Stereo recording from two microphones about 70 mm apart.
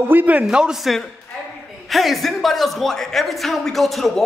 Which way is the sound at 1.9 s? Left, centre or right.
Centre.